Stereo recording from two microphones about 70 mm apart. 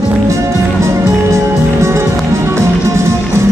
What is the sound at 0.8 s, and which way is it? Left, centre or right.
Music, right.